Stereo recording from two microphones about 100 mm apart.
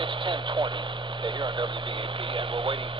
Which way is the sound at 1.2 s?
50° right (ahead or behind).